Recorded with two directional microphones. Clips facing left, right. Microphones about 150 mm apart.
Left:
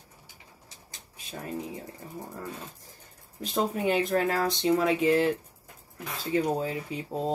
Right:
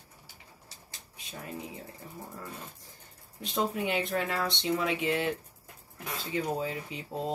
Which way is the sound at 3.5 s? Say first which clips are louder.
Left 4 dB; 40° left (ahead or behind).